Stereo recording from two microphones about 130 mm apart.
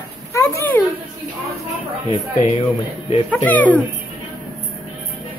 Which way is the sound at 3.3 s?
10° left (ahead or behind).